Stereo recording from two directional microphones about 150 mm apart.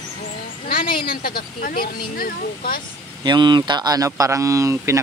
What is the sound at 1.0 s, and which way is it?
Speech, 75° left (ahead or behind).